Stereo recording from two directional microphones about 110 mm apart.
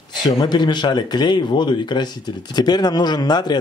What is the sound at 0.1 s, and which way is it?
Speech, 40° left (ahead or behind).